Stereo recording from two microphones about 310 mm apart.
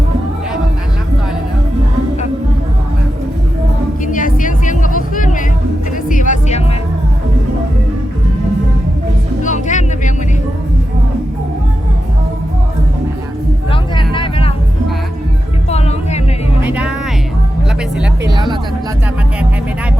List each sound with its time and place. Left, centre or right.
4.0 s music: left
9.4 s music: left
13.7 s vehicle: centre
16.6 s music: centre
18.0 s music: centre